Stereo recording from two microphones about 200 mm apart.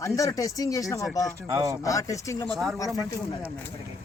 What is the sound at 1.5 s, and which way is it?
Speech, 15° right (ahead or behind).